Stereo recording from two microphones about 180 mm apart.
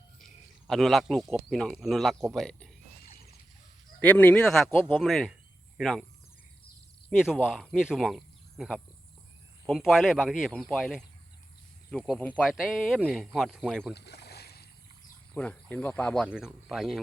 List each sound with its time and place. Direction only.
0.7 s speech: centre (ahead or behind)
3.0 s a sound: 60° left (ahead or behind)
4.0 s a man's voice: 10° left (ahead or behind)
7.1 s speech: centre (ahead or behind)
13.9 s boat: 65° left (ahead or behind)
15.4 s speech: 10° left (ahead or behind)